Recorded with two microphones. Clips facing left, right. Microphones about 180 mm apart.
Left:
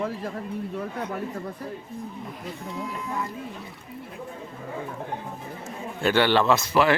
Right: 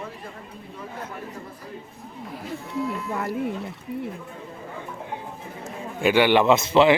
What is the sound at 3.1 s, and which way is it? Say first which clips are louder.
Speech: right 3 dB; 65° right (ahead or behind).